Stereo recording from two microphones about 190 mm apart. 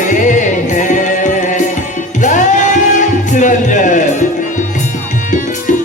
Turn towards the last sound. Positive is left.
turn(degrees=40)  # may be behind; listen again after turning